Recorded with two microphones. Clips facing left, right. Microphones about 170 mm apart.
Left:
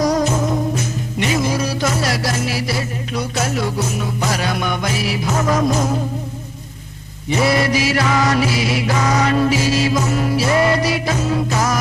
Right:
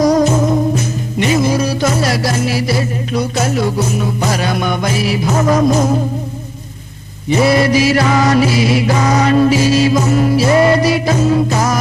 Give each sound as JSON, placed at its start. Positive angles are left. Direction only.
{"t": 0.1, "sound": "music", "side_deg": -40}
{"t": 7.3, "sound": "music", "side_deg": -30}